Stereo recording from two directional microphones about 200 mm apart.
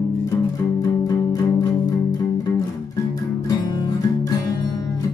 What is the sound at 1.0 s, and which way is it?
Music, 20° left (ahead or behind).